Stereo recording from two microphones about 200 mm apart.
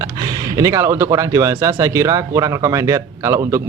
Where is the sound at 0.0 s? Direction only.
15° right (ahead or behind).